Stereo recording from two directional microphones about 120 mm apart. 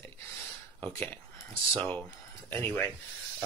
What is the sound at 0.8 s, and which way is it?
A man's voice, 15° left (ahead or behind).